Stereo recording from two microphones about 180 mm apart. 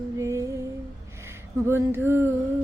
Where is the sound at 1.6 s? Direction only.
15° right (ahead or behind).